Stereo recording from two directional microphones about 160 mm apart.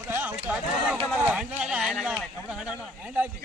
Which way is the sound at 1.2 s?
10° right (ahead or behind).